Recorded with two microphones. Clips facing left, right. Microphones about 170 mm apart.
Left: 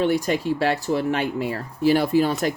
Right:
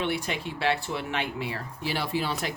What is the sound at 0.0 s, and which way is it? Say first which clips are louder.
Speech: left 9 dB; 40° left (ahead or behind).